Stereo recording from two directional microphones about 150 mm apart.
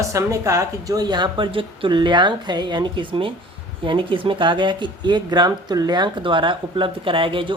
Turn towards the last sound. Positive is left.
turn(degrees=-35)  # may be behind; listen again after turning